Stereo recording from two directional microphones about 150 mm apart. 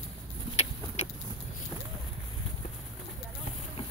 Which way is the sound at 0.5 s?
45° left (ahead or behind).